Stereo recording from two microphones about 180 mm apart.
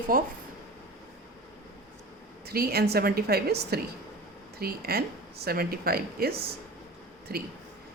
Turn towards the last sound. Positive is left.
turn(degrees=-60)  # may be behind; listen again after turning